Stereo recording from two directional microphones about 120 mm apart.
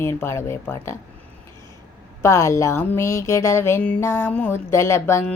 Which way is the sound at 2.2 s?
25° left (ahead or behind).